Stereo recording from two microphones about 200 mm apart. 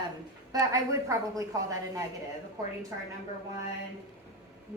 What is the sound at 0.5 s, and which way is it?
A woman's voice, 15° right (ahead or behind).